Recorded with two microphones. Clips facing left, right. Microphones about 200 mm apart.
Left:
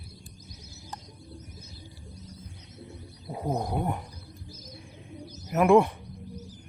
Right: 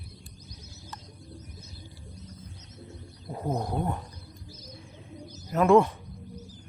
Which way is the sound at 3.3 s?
15° left (ahead or behind).